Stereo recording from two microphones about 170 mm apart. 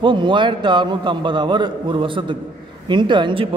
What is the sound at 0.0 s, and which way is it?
Speech, 30° right (ahead or behind).